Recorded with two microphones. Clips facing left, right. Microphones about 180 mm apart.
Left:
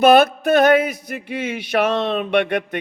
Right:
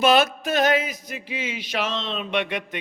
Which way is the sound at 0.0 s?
55° left (ahead or behind).